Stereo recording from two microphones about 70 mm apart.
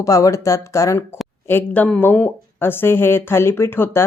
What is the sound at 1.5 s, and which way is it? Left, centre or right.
Speech, left.